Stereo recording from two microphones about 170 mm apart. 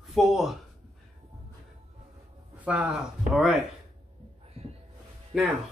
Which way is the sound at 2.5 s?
10° right (ahead or behind).